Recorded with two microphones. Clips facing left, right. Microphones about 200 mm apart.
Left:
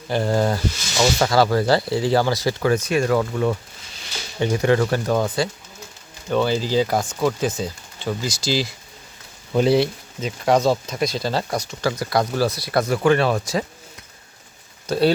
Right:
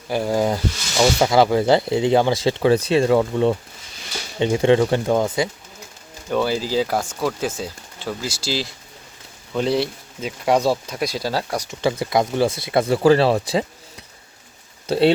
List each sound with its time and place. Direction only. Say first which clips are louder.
0.1 s speech: even; 10° right (ahead or behind)
6.2 s speech: left 1 dB; 5° right (ahead or behind)
11.7 s speech: right 3 dB; 25° right (ahead or behind)
14.8 s speech: right 2 dB; 25° right (ahead or behind)